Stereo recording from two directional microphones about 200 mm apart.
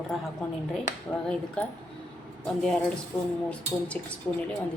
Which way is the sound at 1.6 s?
5° left (ahead or behind).